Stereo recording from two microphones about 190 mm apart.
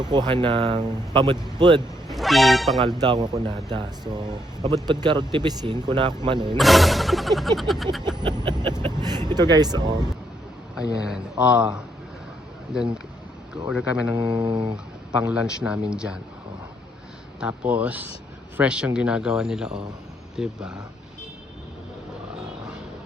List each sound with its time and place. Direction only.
0.1 s speech: 25° right (ahead or behind)
2.0 s speech: centre (ahead or behind)
3.0 s speech: 20° right (ahead or behind)
6.6 s speech: centre (ahead or behind)
8.0 s speech: 25° right (ahead or behind)
11.1 s speech: 5° right (ahead or behind)
14.2 s speech: 25° right (ahead or behind)
15.6 s speech: 5° right (ahead or behind)
17.7 s speech: 10° right (ahead or behind)